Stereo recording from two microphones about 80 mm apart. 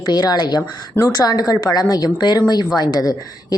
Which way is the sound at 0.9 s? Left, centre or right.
Left.